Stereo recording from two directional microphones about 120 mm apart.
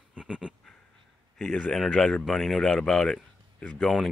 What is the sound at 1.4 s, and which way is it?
Speech, 5° left (ahead or behind).